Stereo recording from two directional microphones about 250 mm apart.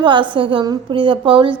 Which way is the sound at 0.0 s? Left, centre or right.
Centre.